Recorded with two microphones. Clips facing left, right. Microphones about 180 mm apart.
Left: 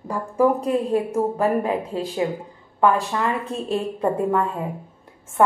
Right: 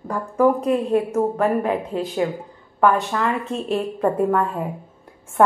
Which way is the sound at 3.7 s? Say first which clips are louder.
Right 1 dB; 25° left (ahead or behind).